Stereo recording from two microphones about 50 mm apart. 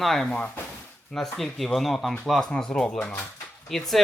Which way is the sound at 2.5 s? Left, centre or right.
Centre.